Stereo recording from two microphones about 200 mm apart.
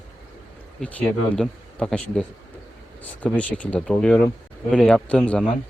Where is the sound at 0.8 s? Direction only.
5° left (ahead or behind).